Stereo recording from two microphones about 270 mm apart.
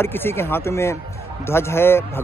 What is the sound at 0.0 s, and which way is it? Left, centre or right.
Speech, centre.